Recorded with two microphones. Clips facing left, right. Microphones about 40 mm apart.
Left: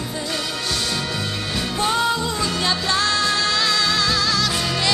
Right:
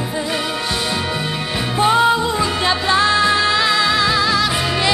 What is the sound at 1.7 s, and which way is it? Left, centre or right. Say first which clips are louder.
Music: right 7 dB; right.